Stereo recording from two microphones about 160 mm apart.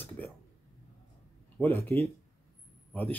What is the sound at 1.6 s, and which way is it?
Speech, 15° left (ahead or behind).